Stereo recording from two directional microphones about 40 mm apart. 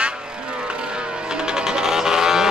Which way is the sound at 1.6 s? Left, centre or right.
Centre.